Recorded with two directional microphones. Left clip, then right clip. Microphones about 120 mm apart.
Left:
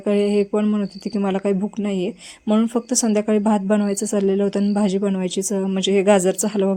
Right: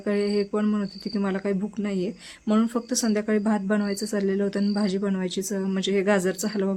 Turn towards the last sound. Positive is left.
turn(degrees=35)  # may be behind; listen again after turning